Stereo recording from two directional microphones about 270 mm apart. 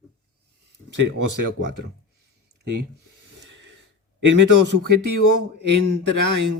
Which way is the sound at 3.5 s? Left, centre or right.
Right.